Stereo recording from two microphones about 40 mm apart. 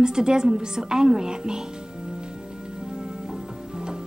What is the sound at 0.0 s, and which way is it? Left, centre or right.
A woman's voice, centre.